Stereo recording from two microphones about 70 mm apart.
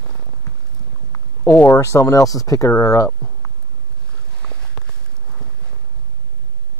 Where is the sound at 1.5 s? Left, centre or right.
Left.